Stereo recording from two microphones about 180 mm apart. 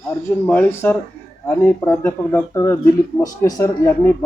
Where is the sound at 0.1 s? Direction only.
15° left (ahead or behind).